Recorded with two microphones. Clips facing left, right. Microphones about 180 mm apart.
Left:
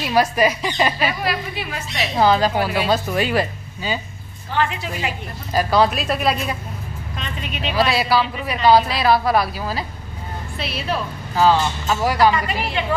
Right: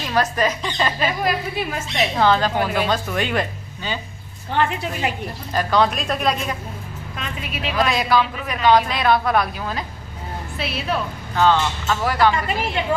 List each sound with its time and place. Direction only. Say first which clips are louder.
0.0 s speech: left 3 dB; 10° left (ahead or behind)
2.1 s speech: left 3 dB; 10° left (ahead or behind)
4.6 s a woman's voice: right 1 dB; 55° right (ahead or behind)
5.5 s speech: left 2 dB; 10° left (ahead or behind)
7.7 s speech: left 1 dB; 5° left (ahead or behind)